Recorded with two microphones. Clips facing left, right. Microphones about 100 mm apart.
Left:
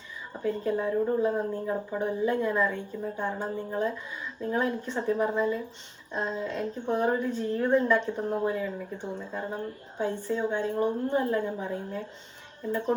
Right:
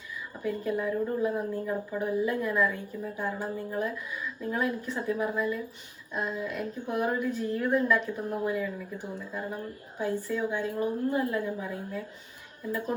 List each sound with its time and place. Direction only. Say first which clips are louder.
0.4 s speech: left 2 dB; 25° left (ahead or behind)